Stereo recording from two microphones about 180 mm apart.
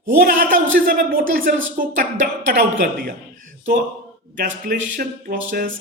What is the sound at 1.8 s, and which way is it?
A woman's voice, 55° right (ahead or behind).